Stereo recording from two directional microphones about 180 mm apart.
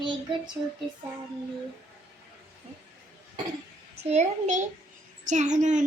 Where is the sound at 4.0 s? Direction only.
40° right (ahead or behind).